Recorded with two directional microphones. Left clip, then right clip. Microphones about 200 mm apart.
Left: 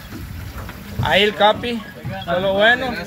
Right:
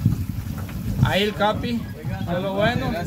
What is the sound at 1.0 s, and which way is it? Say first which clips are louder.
Speech: left 7 dB; 5° right (ahead or behind).